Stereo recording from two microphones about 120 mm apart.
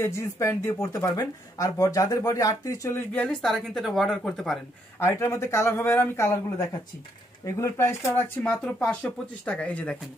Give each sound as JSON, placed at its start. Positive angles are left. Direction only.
{"t": 0.0, "sound": "speech", "side_deg": 25}
{"t": 3.1, "sound": "speech", "side_deg": 10}
{"t": 4.9, "sound": "speech", "side_deg": 20}
{"t": 7.4, "sound": "speech", "side_deg": 20}
{"t": 8.5, "sound": "speech", "side_deg": 5}